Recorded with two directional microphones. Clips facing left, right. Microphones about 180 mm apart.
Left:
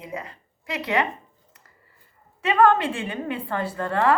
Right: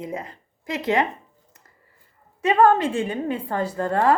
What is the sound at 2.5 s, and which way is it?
A woman's voice, 35° right (ahead or behind).